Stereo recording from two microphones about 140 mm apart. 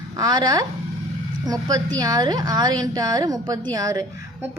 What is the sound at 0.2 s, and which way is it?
A woman's voice, 30° right (ahead or behind).